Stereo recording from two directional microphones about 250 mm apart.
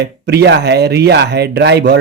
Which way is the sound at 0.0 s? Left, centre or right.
Right.